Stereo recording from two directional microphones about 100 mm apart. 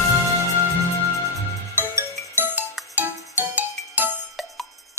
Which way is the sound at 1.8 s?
20° right (ahead or behind).